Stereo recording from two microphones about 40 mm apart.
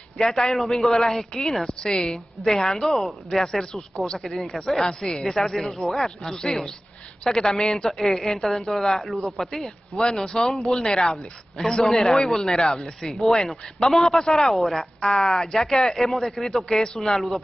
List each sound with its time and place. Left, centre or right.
0.2 s speech: centre
0.6 s a woman's voice: centre
2.4 s a woman's voice: centre
9.5 s speech: centre
13.1 s a woman's voice: centre
15.0 s speech: centre